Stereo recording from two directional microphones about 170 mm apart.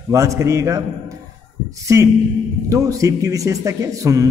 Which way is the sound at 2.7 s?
20° right (ahead or behind).